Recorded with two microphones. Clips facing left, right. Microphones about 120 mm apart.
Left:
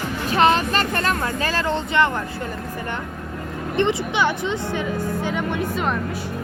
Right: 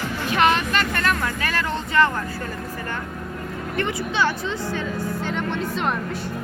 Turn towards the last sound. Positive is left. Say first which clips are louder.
# left 2 dB
turn(degrees=10)  # may be behind; listen again after turning